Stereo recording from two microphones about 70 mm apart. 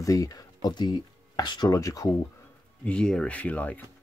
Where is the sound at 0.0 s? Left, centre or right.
Left.